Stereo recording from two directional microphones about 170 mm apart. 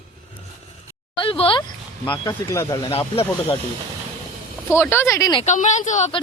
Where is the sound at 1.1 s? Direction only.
30° left (ahead or behind).